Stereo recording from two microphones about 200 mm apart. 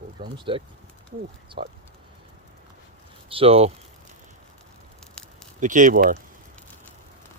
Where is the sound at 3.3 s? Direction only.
30° right (ahead or behind).